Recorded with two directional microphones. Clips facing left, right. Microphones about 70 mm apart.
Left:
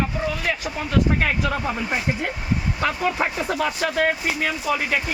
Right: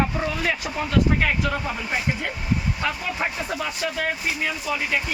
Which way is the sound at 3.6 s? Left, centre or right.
Left.